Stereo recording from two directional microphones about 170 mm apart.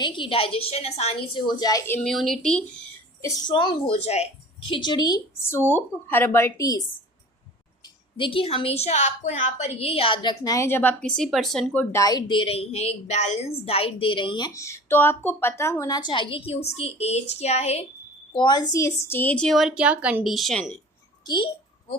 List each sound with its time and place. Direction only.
0.0 s a woman's voice: 30° left (ahead or behind)
1.5 s a woman's voice: 25° left (ahead or behind)
2.0 s a woman's voice: centre (ahead or behind)
3.2 s a woman's voice: 20° left (ahead or behind)
3.5 s a woman's voice: 30° left (ahead or behind)
4.7 s a woman's voice: 25° left (ahead or behind)
8.1 s a woman's voice: 30° left (ahead or behind)
18.3 s a woman's voice: 25° left (ahead or behind); by 20.7 s centre (ahead or behind)
21.2 s a sound: 30° left (ahead or behind)